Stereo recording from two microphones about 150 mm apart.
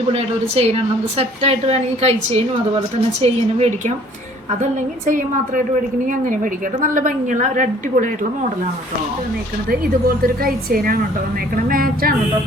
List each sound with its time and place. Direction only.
0.1 s a woman's voice: 40° right (ahead or behind)
4.6 s a woman's voice: 60° right (ahead or behind)
10.2 s a woman's voice: 75° right (ahead or behind)